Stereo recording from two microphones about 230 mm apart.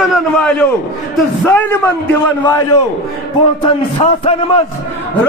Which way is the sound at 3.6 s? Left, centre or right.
Left.